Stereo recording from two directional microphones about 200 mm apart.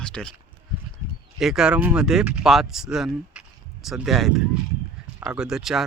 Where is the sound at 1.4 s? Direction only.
Centre (ahead or behind).